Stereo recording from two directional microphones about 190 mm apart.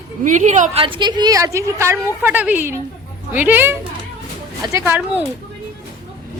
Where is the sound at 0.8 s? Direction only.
25° right (ahead or behind); by 5.2 s 10° right (ahead or behind).